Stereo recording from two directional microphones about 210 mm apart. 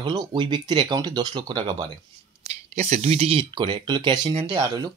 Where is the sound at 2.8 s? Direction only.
30° right (ahead or behind).